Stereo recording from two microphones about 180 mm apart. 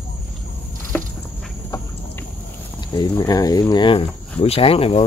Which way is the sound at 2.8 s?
25° left (ahead or behind).